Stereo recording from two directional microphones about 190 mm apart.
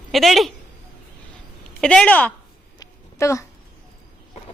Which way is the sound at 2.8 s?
15° left (ahead or behind).